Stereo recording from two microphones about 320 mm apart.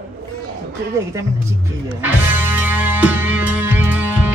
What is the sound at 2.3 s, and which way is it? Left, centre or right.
Music, centre.